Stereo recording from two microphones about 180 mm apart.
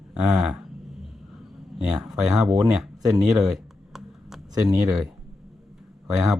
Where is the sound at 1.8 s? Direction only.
5° right (ahead or behind).